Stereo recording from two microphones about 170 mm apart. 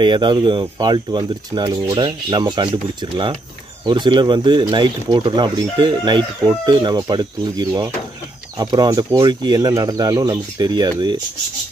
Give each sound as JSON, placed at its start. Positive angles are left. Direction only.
{"t": 0.0, "sound": "speech", "side_deg": -25}